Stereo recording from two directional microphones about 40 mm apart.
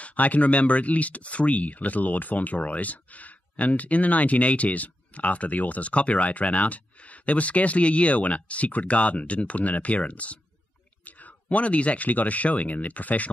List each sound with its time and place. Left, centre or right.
0.0 s speech: left